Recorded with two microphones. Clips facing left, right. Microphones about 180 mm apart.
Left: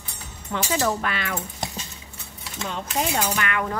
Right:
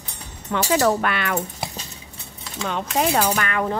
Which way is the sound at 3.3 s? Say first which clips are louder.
Right 3 dB; 35° right (ahead or behind).